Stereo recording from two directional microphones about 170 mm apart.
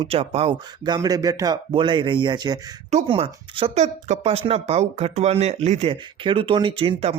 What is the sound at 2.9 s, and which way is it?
Speech, 40° right (ahead or behind).